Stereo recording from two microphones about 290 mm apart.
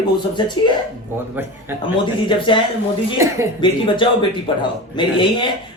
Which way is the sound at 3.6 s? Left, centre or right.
Centre.